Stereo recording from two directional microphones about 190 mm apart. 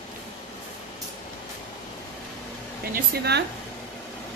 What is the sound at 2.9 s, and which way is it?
Speech, 60° right (ahead or behind).